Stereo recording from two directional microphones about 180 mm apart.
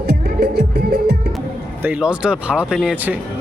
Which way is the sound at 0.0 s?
65° right (ahead or behind).